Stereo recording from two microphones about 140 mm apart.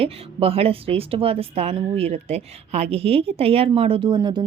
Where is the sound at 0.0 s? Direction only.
45° right (ahead or behind).